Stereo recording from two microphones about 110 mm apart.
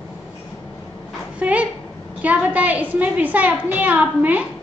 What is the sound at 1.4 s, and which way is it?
A woman's voice, 10° right (ahead or behind).